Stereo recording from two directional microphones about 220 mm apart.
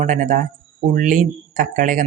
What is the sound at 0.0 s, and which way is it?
Speech, 35° right (ahead or behind).